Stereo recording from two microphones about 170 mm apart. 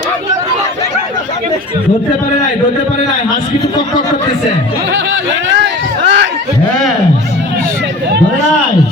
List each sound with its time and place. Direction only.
4.9 s chatter: 90° right